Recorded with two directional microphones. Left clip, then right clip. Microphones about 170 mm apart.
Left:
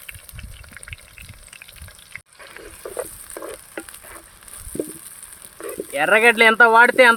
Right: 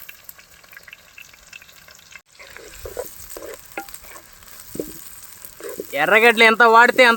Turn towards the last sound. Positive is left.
turn(degrees=-30)  # may be behind; listen again after turning